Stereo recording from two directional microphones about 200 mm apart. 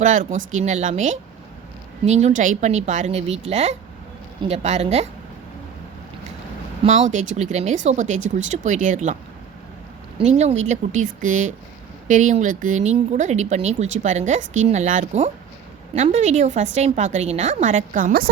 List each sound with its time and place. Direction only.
0.0 s speech: 40° right (ahead or behind)
6.8 s speech: 35° right (ahead or behind)
10.2 s speech: 35° right (ahead or behind)